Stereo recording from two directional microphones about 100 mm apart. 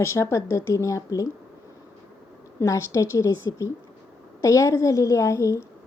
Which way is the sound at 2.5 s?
30° left (ahead or behind).